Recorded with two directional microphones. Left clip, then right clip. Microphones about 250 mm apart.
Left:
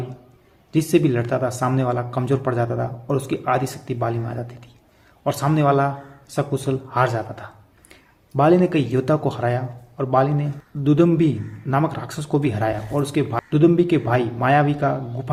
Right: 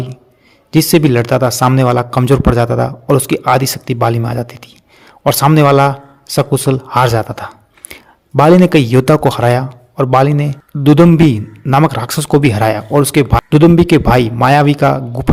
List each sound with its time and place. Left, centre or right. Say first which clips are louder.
0.7 s a man's voice: right 8 dB; right